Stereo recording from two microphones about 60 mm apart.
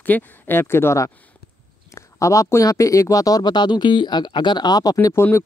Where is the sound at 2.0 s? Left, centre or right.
Left.